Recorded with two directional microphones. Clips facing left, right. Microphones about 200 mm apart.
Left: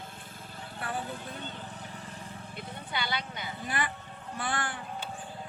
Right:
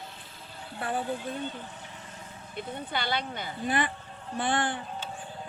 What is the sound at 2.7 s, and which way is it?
Speech, 50° right (ahead or behind).